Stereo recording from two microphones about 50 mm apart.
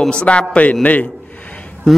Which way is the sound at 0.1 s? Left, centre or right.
Left.